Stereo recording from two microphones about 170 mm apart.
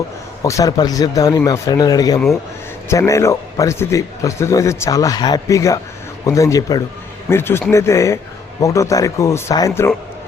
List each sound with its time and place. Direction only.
0.4 s a man's voice: 20° left (ahead or behind)